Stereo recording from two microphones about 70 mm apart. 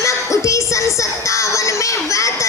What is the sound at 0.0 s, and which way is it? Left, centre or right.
Music, left.